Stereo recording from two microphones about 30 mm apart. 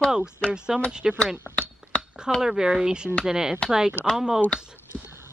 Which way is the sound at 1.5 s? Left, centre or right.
Left.